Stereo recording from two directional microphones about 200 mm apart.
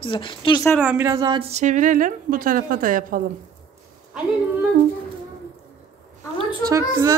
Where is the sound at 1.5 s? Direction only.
35° right (ahead or behind).